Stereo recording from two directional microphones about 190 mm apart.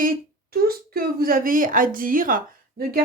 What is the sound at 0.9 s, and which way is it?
Speech, 50° right (ahead or behind).